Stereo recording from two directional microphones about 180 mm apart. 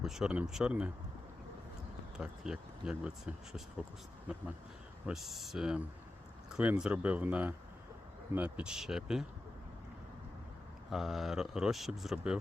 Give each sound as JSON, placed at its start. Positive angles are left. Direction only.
{"t": 0.0, "sound": "speech", "side_deg": 0}
{"t": 2.1, "sound": "speech", "side_deg": -5}
{"t": 5.0, "sound": "speech", "side_deg": 0}
{"t": 10.8, "sound": "speech", "side_deg": 0}